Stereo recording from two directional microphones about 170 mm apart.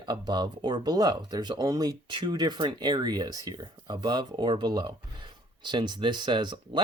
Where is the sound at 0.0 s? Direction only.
25° right (ahead or behind).